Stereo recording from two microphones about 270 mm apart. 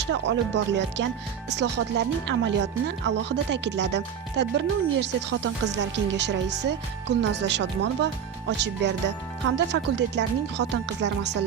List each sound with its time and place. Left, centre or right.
0.0 s speech: right